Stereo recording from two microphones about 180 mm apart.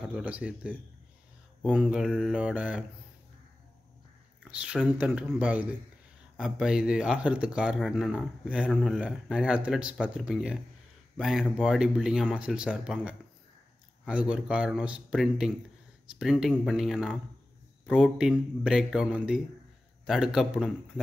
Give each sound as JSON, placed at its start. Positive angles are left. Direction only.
{"t": 0.1, "sound": "speech", "side_deg": -5}
{"t": 4.5, "sound": "speech", "side_deg": -5}